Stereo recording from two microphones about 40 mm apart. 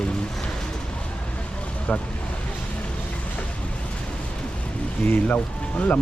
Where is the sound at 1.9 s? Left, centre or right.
Left.